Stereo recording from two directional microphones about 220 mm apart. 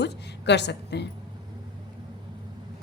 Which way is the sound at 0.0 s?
50° left (ahead or behind).